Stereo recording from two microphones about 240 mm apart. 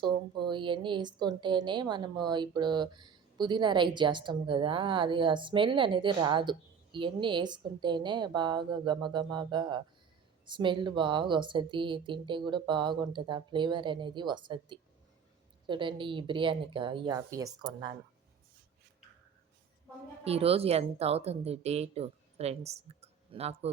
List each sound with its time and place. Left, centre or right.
0.0 s a woman's voice: centre
20.2 s a woman's voice: right